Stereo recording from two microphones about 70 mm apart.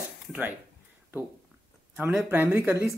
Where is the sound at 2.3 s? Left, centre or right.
Right.